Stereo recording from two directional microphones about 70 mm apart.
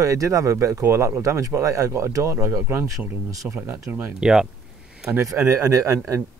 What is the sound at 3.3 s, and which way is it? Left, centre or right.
Speech, right.